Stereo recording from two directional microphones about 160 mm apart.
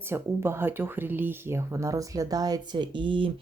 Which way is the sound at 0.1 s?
15° right (ahead or behind).